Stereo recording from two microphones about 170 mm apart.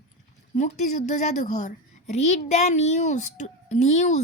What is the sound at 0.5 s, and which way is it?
A woman's voice, 40° left (ahead or behind).